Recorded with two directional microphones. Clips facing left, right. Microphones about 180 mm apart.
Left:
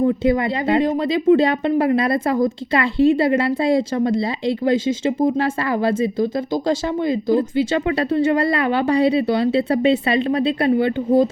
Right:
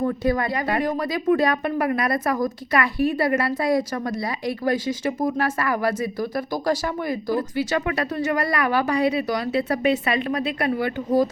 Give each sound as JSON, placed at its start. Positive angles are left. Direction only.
{"t": 0.0, "sound": "speech", "side_deg": 20}